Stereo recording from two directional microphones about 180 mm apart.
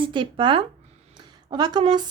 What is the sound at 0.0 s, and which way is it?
A woman's voice, 25° right (ahead or behind).